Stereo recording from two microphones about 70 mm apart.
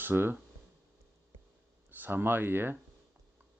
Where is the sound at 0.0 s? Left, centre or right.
Right.